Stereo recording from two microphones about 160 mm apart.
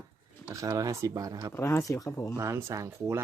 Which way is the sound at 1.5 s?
20° left (ahead or behind).